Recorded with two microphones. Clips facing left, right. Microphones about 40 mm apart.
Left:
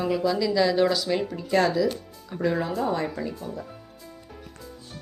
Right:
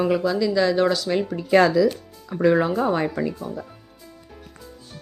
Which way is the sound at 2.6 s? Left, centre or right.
Right.